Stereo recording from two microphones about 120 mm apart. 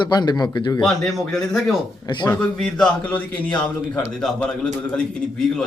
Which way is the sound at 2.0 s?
40° left (ahead or behind).